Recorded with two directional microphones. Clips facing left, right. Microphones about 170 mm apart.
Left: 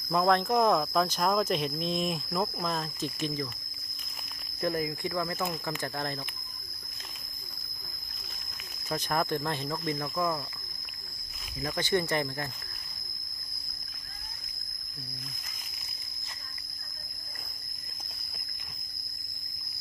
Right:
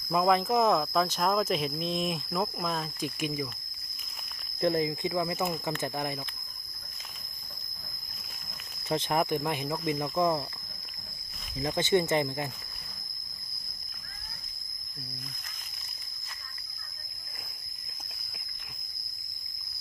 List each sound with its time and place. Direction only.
0.1 s speech: 5° right (ahead or behind)
4.6 s speech: 25° right (ahead or behind)
8.9 s speech: 25° right (ahead or behind)
10.2 s speech: 25° right (ahead or behind)
11.6 s speech: 20° right (ahead or behind)